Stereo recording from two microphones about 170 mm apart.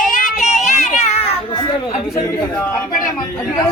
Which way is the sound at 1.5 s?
25° left (ahead or behind).